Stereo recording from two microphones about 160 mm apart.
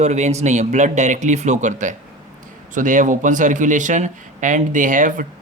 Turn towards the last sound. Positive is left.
turn(degrees=-55)  # may be behind; listen again after turning